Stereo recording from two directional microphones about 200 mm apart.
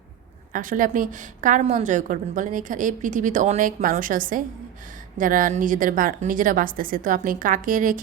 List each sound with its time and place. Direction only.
0.5 s a woman's voice: 40° right (ahead or behind)